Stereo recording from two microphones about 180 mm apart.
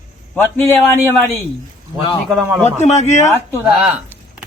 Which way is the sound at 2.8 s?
40° left (ahead or behind).